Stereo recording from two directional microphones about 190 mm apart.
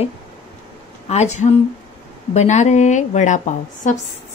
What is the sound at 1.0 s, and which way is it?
Speech, 35° left (ahead or behind).